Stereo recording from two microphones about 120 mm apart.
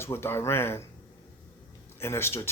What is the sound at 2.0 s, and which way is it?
Speech, 20° left (ahead or behind).